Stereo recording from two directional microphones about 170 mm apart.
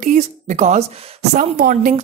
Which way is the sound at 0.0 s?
45° right (ahead or behind).